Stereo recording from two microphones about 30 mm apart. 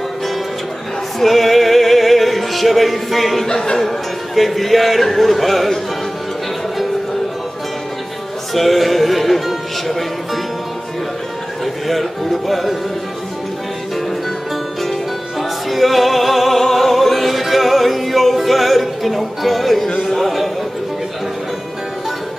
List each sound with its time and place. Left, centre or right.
1.2 s music: centre
3.4 s speech: centre
4.4 s a man's voice: centre
8.5 s music: centre
11.6 s speech: centre
15.7 s music: centre
20.0 s a sound: centre